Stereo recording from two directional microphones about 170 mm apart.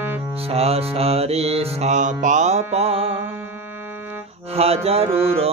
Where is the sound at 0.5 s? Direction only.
35° right (ahead or behind).